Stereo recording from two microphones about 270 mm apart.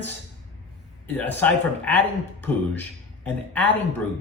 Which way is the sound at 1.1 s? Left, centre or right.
Centre.